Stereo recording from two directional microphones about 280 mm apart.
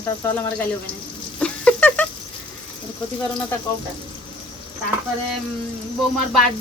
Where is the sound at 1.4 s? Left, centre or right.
Centre.